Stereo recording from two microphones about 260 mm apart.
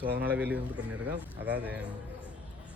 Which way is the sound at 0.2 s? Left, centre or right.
Centre.